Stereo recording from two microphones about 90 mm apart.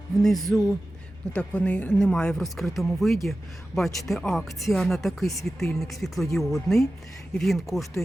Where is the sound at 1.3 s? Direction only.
15° left (ahead or behind).